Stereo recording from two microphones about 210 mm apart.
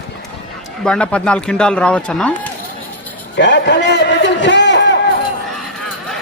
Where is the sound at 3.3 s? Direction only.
55° left (ahead or behind).